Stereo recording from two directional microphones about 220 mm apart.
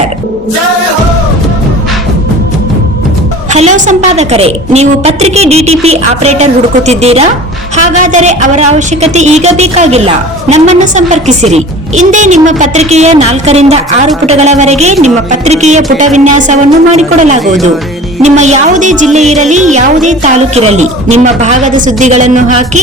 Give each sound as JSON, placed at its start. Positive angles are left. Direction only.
{"t": 3.5, "sound": "a woman's voice", "side_deg": -30}